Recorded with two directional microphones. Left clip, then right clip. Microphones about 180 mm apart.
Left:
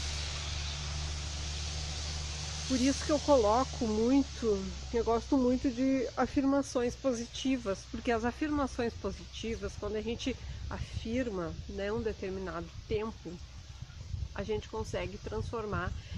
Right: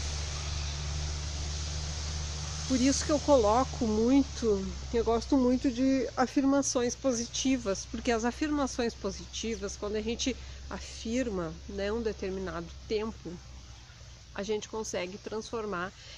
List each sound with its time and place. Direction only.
2.8 s speech: 10° right (ahead or behind)
14.3 s speech: 10° right (ahead or behind)